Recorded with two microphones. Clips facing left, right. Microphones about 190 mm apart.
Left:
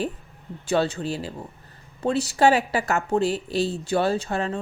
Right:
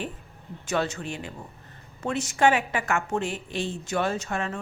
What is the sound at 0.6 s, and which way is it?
Speech, 30° left (ahead or behind).